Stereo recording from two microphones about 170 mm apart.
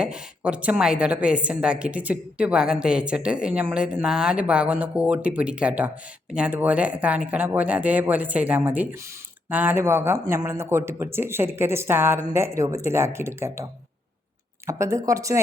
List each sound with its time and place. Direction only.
0.0 s a woman's voice: 5° right (ahead or behind)
14.7 s speech: 20° right (ahead or behind)